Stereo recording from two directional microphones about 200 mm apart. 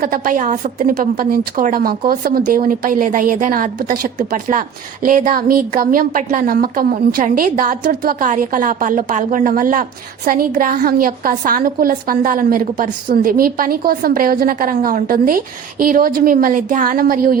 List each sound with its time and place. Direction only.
0.0 s a woman's voice: 45° right (ahead or behind)